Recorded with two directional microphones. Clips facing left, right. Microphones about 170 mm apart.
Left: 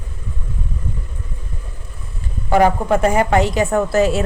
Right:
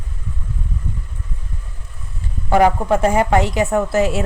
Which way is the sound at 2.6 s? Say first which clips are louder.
Even; 10° right (ahead or behind).